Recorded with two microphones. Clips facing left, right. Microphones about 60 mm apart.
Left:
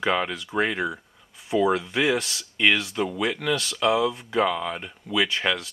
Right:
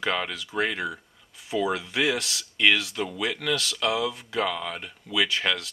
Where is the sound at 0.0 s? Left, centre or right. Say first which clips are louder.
Left 4 dB; centre.